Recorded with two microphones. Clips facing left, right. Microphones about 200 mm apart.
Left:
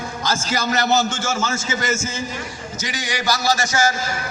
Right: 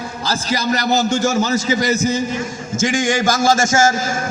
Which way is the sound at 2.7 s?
50° right (ahead or behind).